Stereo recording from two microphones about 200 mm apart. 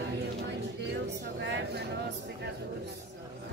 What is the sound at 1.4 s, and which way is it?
Speech, 60° right (ahead or behind).